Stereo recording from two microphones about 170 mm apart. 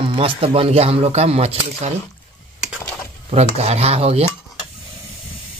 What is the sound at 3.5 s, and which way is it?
Speech, 40° right (ahead or behind).